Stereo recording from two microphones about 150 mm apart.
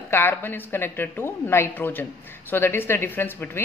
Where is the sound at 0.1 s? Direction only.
15° left (ahead or behind).